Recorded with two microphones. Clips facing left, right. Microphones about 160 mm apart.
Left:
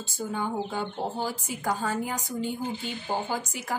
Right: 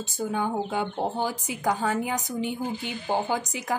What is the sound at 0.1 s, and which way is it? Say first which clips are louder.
A woman's voice: right 3 dB; 15° right (ahead or behind).